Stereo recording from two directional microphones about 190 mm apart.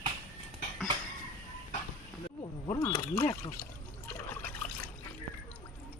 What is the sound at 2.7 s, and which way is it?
Speech, 20° left (ahead or behind).